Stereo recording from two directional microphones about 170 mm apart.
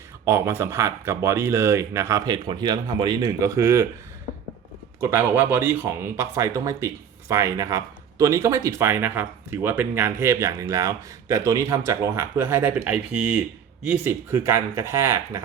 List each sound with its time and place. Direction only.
0.3 s speech: 15° right (ahead or behind)
4.9 s speech: 10° right (ahead or behind)